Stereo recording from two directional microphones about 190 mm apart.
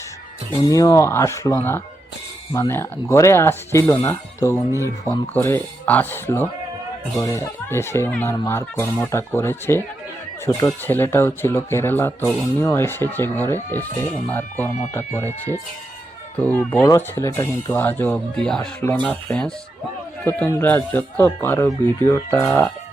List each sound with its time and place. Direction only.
0.7 s speech: 15° left (ahead or behind)